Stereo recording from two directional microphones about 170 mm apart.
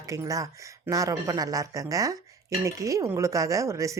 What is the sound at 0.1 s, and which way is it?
Speech, 20° right (ahead or behind).